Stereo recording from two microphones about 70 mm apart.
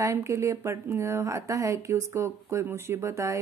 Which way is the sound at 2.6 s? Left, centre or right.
Right.